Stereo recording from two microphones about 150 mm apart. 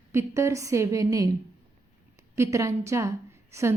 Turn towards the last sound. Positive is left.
turn(degrees=-20)  # may be behind; listen again after turning